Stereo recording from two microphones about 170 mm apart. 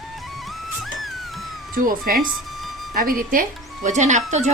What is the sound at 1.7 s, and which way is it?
Speech, 55° right (ahead or behind).